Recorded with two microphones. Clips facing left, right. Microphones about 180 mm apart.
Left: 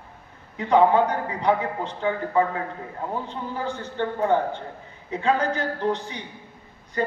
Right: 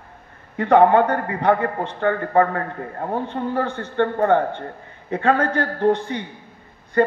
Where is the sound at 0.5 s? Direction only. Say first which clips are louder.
Right 4 dB; 60° right (ahead or behind).